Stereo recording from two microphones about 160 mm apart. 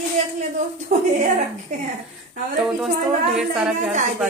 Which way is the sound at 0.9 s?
65° right (ahead or behind).